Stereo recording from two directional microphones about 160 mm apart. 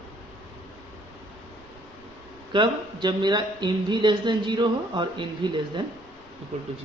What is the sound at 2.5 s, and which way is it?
Speech, 30° right (ahead or behind).